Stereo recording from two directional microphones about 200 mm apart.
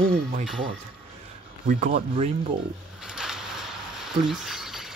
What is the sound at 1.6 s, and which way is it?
Speech, 40° right (ahead or behind).